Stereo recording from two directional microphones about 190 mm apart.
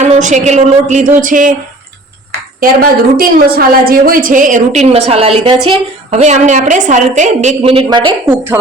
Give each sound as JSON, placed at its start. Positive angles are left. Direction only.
{"t": 0.0, "sound": "a woman's voice", "side_deg": -40}
{"t": 2.6, "sound": "a woman's voice", "side_deg": -50}
{"t": 7.6, "sound": "speech", "side_deg": -30}